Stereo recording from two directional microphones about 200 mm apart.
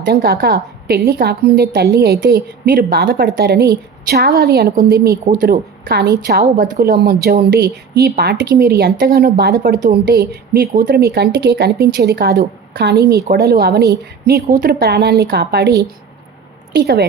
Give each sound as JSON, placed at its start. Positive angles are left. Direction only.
{"t": 0.0, "sound": "a woman's voice", "side_deg": -45}